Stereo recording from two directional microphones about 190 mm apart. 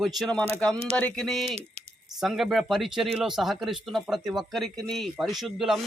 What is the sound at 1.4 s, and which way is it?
Speech, 35° right (ahead or behind).